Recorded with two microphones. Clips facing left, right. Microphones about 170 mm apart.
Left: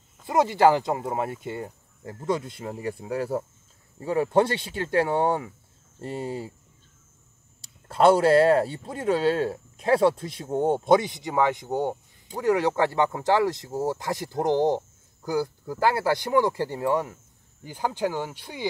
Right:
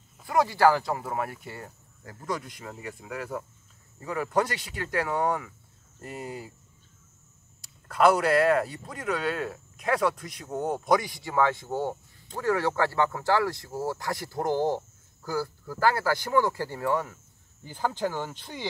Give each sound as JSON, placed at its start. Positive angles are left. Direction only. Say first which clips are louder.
{"t": 0.3, "sound": "speech", "louder": "left 2 dB", "side_deg": 20}
{"t": 7.6, "sound": "speech", "louder": "left 3 dB", "side_deg": 30}